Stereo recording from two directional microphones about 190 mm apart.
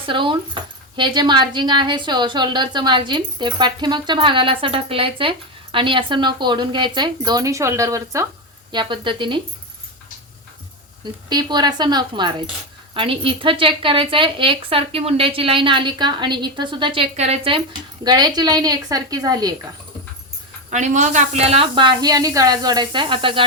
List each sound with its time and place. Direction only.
0.0 s speech: 25° right (ahead or behind)
11.3 s speech: 20° right (ahead or behind)
20.7 s speech: 40° right (ahead or behind)